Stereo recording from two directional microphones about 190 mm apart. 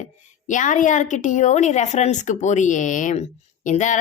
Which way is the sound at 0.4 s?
40° left (ahead or behind).